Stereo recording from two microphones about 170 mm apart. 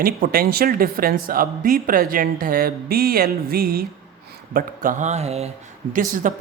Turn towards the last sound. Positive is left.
turn(degrees=-50)  # may be behind; listen again after turning